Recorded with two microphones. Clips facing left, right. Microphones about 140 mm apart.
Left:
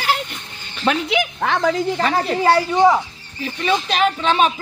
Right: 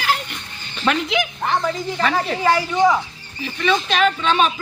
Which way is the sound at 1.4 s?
90° left.